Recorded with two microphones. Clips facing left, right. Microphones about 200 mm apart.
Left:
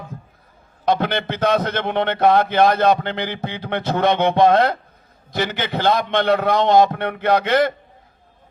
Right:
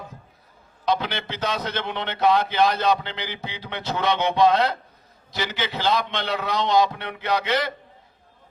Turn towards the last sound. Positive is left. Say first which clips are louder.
# left 7 dB
turn(degrees=50)  # may be behind; listen again after turning